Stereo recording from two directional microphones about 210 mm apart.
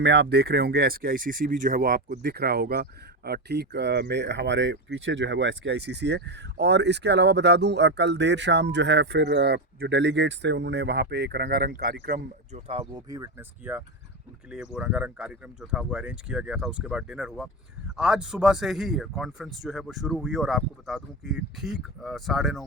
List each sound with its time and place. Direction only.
0.0 s speech: 55° right (ahead or behind); by 22.6 s centre (ahead or behind)